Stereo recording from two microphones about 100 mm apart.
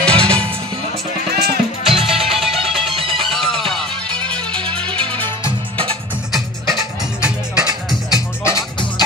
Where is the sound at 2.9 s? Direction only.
70° right (ahead or behind).